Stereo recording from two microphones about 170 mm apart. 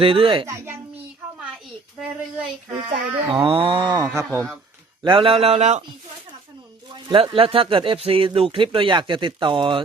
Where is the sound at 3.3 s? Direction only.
30° right (ahead or behind).